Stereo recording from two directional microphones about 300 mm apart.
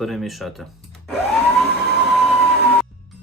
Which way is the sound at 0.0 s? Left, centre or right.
Centre.